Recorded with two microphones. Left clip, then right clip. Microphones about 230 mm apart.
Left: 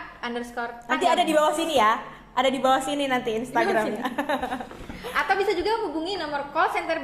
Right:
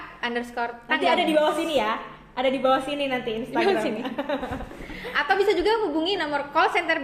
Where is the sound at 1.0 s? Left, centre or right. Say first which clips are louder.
Left 1 dB; left.